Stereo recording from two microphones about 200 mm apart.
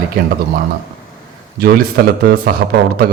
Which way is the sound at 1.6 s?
55° right (ahead or behind).